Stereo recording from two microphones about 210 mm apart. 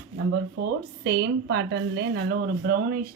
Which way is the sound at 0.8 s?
55° right (ahead or behind).